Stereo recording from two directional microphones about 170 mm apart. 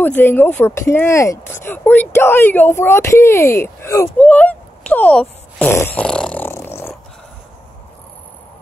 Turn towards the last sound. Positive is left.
turn(degrees=15)  # may be behind; listen again after turning